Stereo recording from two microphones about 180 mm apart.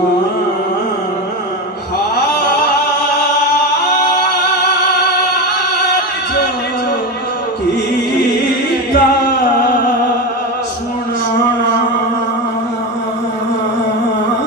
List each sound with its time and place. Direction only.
8.9 s singing: 60° left (ahead or behind)